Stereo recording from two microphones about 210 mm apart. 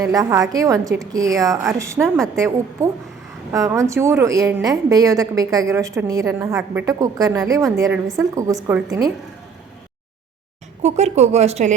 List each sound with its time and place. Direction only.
0.0 s a woman's voice: 15° right (ahead or behind)
10.8 s speech: 30° right (ahead or behind)